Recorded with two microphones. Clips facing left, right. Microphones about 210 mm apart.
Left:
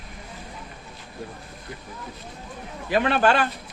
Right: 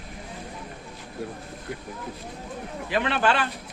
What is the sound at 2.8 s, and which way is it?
Speech, 45° left (ahead or behind).